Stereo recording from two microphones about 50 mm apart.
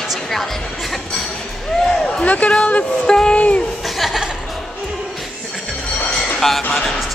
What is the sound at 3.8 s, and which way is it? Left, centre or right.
Speech, centre.